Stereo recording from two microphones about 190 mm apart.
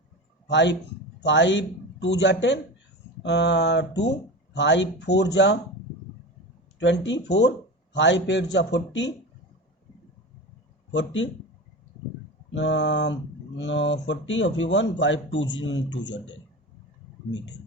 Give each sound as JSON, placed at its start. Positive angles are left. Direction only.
{"t": 0.4, "sound": "a man's voice", "side_deg": 65}
{"t": 6.7, "sound": "a man's voice", "side_deg": 70}
{"t": 10.9, "sound": "speech", "side_deg": 75}
{"t": 12.5, "sound": "speech", "side_deg": 70}